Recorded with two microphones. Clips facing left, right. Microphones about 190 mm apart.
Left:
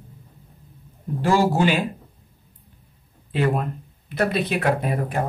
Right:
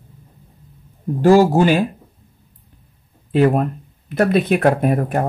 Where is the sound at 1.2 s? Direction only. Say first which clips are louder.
Right 7 dB; 45° right (ahead or behind).